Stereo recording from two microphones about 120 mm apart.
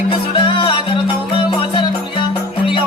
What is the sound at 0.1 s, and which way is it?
Music, 45° left (ahead or behind).